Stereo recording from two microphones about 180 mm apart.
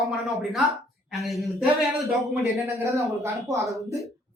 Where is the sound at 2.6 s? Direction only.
15° right (ahead or behind).